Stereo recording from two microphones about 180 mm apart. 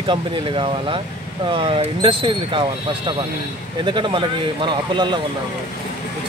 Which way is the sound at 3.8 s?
25° right (ahead or behind).